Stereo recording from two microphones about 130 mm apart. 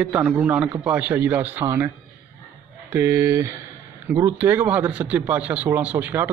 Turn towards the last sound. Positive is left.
turn(degrees=-15)  # may be behind; listen again after turning